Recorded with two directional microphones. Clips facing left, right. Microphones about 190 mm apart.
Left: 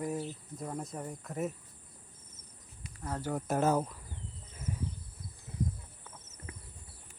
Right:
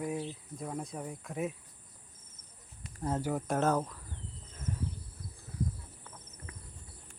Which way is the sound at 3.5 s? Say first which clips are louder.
Left 2 dB; 5° left (ahead or behind).